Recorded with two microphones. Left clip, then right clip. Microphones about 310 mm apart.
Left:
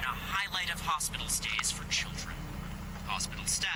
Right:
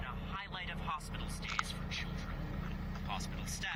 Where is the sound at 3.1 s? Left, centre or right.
Left.